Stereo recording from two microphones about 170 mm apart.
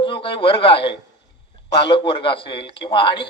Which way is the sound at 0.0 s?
30° left (ahead or behind).